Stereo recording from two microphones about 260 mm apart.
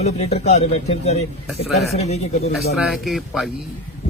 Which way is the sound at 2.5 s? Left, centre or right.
Centre.